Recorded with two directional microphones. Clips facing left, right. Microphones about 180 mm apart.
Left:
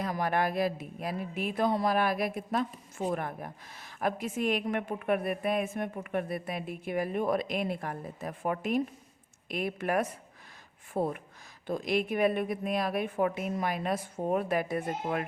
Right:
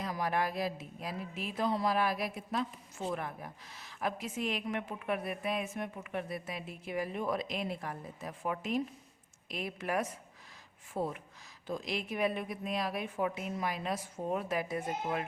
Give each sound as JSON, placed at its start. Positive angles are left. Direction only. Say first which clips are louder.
{"t": 0.0, "sound": "a woman's voice", "louder": "left 4 dB", "side_deg": 55}